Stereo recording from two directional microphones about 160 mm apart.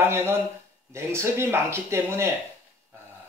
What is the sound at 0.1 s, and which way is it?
Speech, 15° right (ahead or behind).